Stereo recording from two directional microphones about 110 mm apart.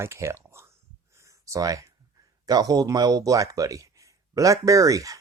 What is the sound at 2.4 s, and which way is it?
Speech, 35° right (ahead or behind).